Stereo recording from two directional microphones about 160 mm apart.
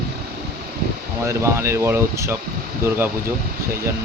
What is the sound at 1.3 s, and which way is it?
Speech, 15° right (ahead or behind).